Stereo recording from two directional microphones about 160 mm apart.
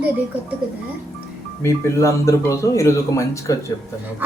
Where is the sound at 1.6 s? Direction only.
15° left (ahead or behind).